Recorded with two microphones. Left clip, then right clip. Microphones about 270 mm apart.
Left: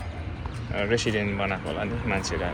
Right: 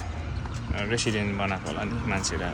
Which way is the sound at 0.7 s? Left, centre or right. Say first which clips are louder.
Left 3 dB; centre.